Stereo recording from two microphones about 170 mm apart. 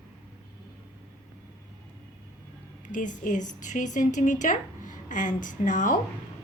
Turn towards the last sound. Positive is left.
turn(degrees=50)  # may be behind; listen again after turning